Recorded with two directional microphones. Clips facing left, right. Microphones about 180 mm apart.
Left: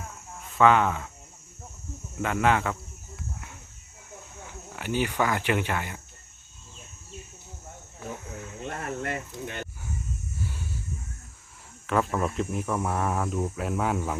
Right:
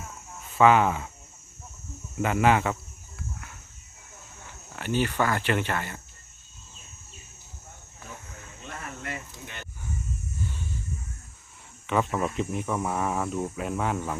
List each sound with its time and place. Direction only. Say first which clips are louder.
0.5 s speech: right 1 dB; 5° right (ahead or behind)
2.2 s speech: right 2 dB; 5° right (ahead or behind)
4.7 s speech: right 1 dB; 15° left (ahead or behind)
8.6 s snake: left 6 dB; 55° left (ahead or behind)
11.9 s speech: even; centre (ahead or behind)